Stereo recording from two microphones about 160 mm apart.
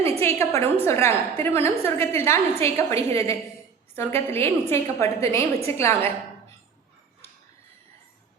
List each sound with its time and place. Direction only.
0.0 s a woman's voice: 15° left (ahead or behind)